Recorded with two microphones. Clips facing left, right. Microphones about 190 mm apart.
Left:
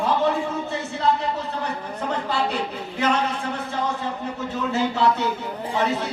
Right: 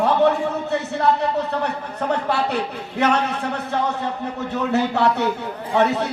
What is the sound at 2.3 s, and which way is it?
Speech, 65° right (ahead or behind).